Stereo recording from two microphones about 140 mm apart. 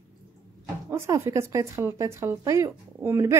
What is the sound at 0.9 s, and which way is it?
Speech, 20° right (ahead or behind).